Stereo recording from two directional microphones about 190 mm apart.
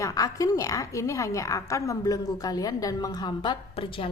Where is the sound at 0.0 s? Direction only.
20° left (ahead or behind).